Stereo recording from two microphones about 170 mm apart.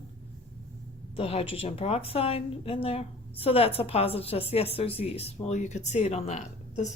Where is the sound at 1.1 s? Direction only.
35° left (ahead or behind).